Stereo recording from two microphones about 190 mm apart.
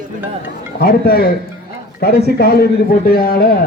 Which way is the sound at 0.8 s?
50° left (ahead or behind).